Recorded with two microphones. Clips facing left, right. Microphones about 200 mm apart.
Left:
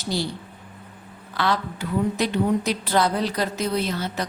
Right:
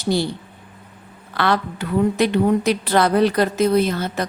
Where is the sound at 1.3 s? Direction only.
60° right (ahead or behind).